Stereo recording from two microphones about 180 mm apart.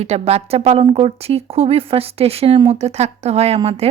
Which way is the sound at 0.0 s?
35° right (ahead or behind).